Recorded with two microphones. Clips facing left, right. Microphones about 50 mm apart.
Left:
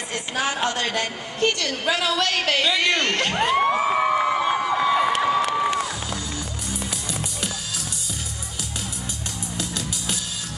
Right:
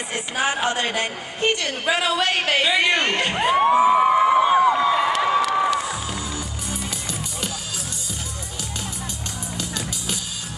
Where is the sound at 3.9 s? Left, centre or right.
Centre.